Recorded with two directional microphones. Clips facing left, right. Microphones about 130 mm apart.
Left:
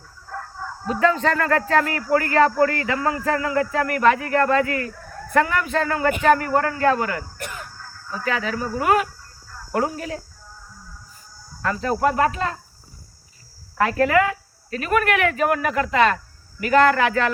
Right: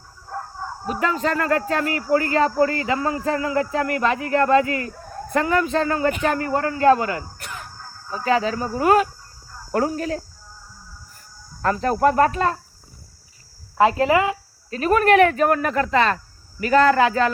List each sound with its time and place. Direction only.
0.3 s speech: 25° right (ahead or behind); by 10.2 s 40° right (ahead or behind)
11.6 s speech: 50° right (ahead or behind)
13.7 s speech: 20° right (ahead or behind)